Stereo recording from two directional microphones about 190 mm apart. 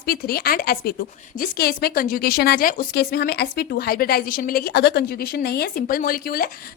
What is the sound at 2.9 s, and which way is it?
A woman's voice, 60° left (ahead or behind).